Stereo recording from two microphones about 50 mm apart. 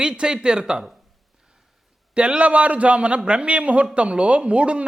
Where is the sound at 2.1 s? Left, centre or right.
Right.